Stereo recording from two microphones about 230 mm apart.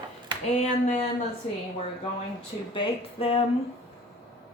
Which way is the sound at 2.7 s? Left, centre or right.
Left.